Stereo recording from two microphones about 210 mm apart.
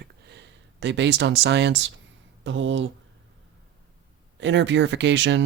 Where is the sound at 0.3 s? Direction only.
55° right (ahead or behind).